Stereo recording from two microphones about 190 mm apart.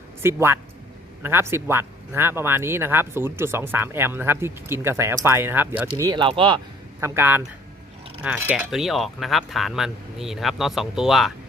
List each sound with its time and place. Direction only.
0.2 s speech: 15° right (ahead or behind)
5.9 s speech: 25° right (ahead or behind)
7.0 s speech: 10° right (ahead or behind)